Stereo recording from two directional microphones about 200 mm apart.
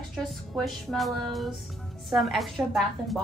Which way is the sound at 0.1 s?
Centre (ahead or behind).